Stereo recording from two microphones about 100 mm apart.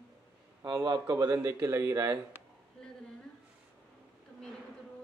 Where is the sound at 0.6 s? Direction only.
40° right (ahead or behind).